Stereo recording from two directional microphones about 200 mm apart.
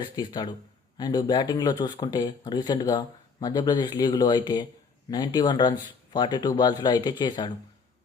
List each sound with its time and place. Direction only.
0.2 s speech: 20° left (ahead or behind)